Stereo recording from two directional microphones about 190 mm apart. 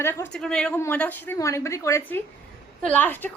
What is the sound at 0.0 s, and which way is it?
A woman's voice, 10° left (ahead or behind).